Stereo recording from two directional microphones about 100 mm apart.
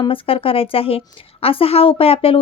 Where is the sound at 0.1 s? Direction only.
65° left (ahead or behind).